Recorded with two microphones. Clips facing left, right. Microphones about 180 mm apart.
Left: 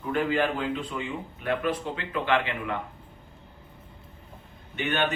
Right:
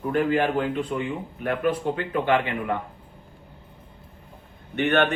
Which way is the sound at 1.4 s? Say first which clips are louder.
Right 4 dB; 50° right (ahead or behind).